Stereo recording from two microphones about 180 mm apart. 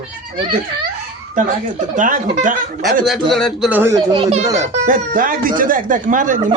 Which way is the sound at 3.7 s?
15° right (ahead or behind).